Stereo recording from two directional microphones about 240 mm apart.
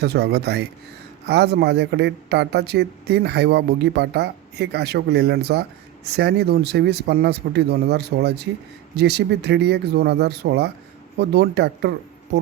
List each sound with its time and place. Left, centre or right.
0.0 s speech: right